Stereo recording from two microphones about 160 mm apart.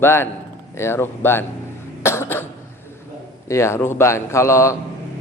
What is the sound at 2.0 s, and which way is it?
Cough, 15° left (ahead or behind).